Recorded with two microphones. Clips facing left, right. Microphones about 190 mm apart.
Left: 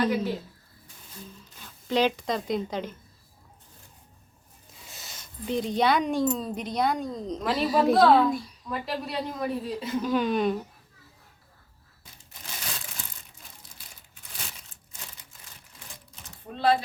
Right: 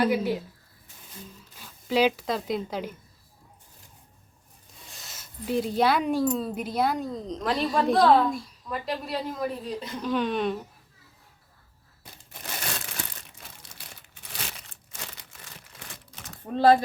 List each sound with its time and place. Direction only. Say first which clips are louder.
0.0 s speech: right 2 dB; 10° right (ahead or behind)
1.5 s speech: right 1 dB; 5° right (ahead or behind)
4.9 s a woman's voice: left 1 dB; centre (ahead or behind)
12.3 s crumpling: right 5 dB; 65° right (ahead or behind)